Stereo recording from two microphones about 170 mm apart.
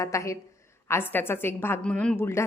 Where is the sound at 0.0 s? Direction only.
15° left (ahead or behind).